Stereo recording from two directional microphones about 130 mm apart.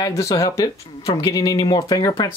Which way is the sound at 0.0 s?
25° left (ahead or behind).